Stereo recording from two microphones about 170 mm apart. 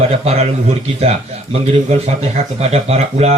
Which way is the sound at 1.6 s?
40° right (ahead or behind).